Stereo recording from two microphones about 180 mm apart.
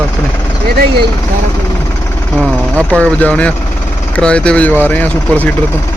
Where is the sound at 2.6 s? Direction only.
5° left (ahead or behind).